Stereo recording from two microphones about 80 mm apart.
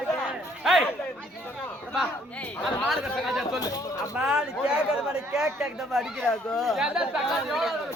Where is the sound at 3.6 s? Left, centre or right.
Left.